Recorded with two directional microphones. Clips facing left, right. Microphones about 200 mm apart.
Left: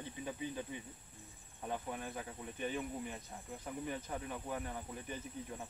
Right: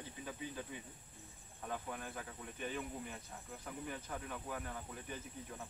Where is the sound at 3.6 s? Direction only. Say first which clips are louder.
Left 4 dB; 15° left (ahead or behind).